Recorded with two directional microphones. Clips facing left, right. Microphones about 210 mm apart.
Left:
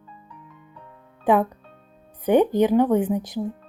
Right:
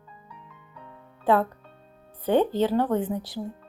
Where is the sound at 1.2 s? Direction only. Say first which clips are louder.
Left 3 dB; 15° left (ahead or behind).